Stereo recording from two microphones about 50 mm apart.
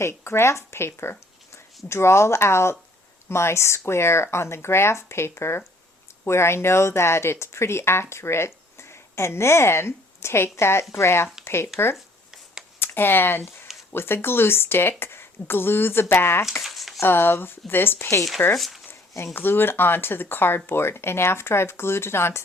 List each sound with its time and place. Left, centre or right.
0.0 s speech: left
11.9 s a sound: centre
12.8 s speech: left
16.6 s a sound: centre
17.0 s speech: left
18.5 s speech: centre
19.1 s speech: left